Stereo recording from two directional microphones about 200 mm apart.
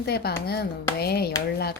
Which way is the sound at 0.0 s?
55° left (ahead or behind).